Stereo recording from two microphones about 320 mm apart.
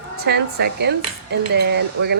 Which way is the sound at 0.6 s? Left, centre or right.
Right.